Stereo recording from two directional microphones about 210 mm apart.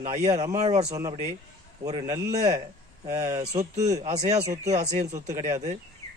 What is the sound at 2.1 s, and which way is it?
Speech, 15° right (ahead or behind).